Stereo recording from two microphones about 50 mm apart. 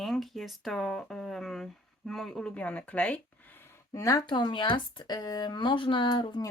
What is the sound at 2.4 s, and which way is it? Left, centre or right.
Speech, left.